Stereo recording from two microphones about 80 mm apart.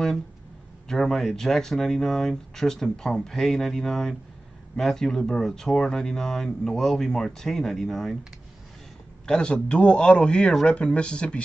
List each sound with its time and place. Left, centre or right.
0.8 s speech: centre
9.2 s speech: centre